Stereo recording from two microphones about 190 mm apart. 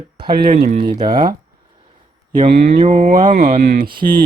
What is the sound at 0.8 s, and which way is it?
Speech, 20° right (ahead or behind).